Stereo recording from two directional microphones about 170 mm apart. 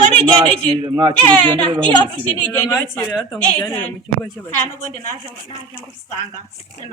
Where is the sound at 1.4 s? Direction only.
30° right (ahead or behind).